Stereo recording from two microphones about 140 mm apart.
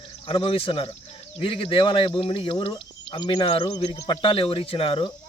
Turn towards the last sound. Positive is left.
turn(degrees=40)  # may be behind; listen again after turning